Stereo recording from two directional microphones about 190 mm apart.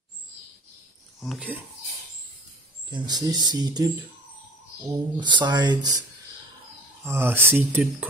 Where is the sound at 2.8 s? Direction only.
20° right (ahead or behind).